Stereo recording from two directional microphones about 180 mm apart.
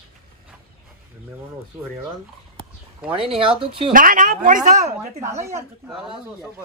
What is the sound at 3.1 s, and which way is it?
Speech, 30° right (ahead or behind).